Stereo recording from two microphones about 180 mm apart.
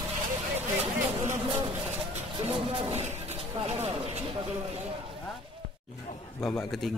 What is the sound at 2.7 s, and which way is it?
Speech, 30° right (ahead or behind).